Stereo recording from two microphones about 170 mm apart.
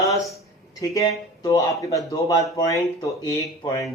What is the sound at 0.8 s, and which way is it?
Speech, 20° left (ahead or behind).